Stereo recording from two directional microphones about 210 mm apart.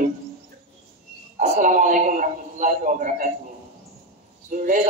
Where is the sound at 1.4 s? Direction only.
40° right (ahead or behind).